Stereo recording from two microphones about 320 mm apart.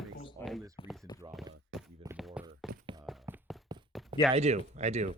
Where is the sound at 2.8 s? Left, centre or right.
Centre.